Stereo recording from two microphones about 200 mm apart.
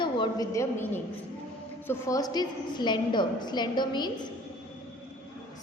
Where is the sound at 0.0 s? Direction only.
20° left (ahead or behind).